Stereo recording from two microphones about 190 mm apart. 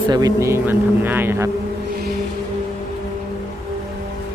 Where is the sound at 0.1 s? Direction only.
20° right (ahead or behind).